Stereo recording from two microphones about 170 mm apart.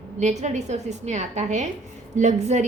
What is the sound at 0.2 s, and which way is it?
A woman's voice, 45° right (ahead or behind).